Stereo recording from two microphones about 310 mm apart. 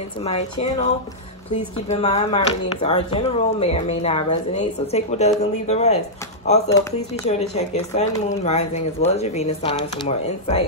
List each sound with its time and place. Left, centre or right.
0.2 s speech: left
1.9 s speech: left